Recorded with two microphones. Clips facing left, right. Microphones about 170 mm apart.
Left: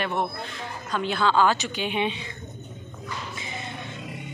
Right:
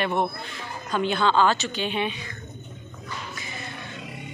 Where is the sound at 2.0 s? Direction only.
25° left (ahead or behind).